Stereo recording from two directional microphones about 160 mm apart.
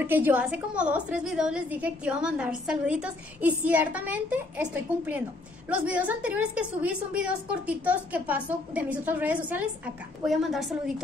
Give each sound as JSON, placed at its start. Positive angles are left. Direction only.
{"t": 0.0, "sound": "a woman's voice", "side_deg": -10}